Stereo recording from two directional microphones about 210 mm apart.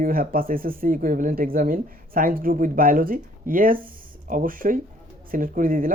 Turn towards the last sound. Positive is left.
turn(degrees=-40)  # may be behind; listen again after turning